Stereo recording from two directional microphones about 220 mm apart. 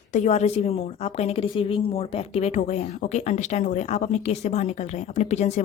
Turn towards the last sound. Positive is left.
turn(degrees=30)  # may be behind; listen again after turning